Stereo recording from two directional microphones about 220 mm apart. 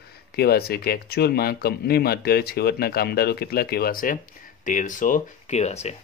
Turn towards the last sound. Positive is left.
turn(degrees=30)  # may be behind; listen again after turning